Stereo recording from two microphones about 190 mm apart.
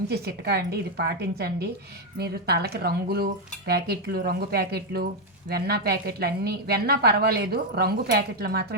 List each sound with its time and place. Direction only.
0.1 s a woman's voice: 55° right (ahead or behind)